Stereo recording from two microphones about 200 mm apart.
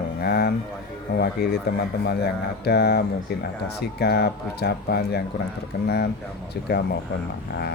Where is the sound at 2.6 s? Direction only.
55° left (ahead or behind).